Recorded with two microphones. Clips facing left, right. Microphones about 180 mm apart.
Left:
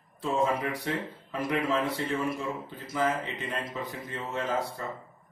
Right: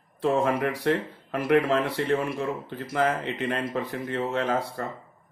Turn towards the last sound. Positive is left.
turn(degrees=-60)  # may be behind; listen again after turning